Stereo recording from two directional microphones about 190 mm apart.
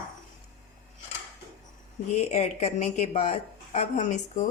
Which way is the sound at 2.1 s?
35° left (ahead or behind).